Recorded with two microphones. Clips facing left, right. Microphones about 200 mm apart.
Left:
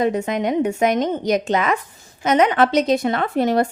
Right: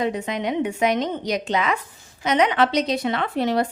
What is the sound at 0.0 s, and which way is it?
Speech, 45° left (ahead or behind).